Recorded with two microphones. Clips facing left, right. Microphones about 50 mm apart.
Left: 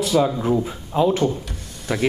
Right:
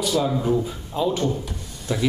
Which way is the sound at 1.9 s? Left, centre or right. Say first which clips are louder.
Left 2 dB; left.